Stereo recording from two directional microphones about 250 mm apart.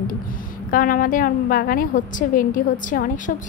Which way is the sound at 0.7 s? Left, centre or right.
Left.